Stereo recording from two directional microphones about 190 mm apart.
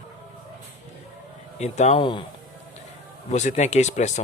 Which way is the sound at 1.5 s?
35° left (ahead or behind).